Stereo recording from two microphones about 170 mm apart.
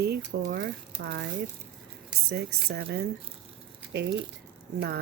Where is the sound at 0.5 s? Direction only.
90° right.